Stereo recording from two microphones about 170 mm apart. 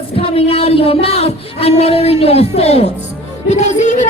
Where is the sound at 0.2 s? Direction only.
35° left (ahead or behind).